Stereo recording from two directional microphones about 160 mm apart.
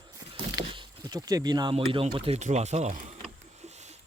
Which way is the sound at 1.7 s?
35° right (ahead or behind).